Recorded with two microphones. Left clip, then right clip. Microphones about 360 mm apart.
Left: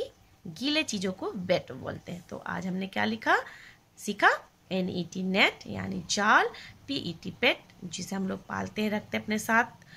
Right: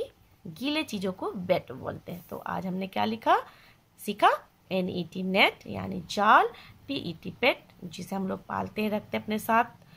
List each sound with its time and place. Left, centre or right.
0.6 s a woman's voice: centre